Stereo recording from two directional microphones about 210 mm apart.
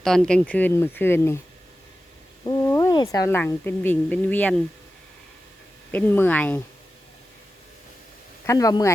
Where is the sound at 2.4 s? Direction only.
15° left (ahead or behind).